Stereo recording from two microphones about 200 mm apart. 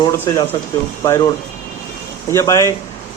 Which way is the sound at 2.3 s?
15° left (ahead or behind).